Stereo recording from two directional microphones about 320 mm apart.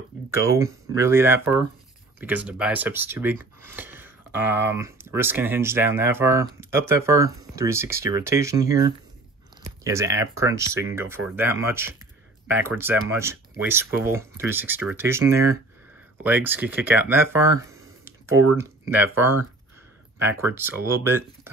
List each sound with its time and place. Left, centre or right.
0.4 s speech: centre
18.3 s speech: right
18.6 s speech: centre